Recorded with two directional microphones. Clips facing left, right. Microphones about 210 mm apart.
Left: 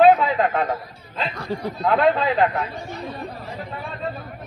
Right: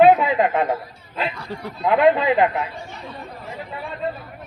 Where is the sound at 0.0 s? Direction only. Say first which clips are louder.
Right 1 dB; 15° right (ahead or behind).